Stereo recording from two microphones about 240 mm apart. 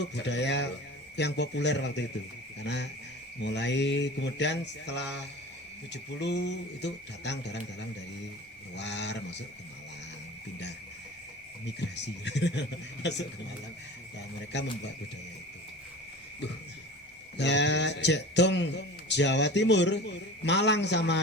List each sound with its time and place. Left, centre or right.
0.0 s a man's voice: left
8.7 s a man's voice: left
11.9 s a man's voice: left
17.3 s a man's voice: left